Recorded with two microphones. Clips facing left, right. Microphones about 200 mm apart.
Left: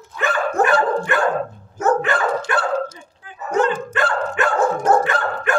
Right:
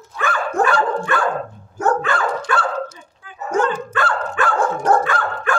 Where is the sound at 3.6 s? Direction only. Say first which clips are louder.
Left 1 dB; 20° left (ahead or behind).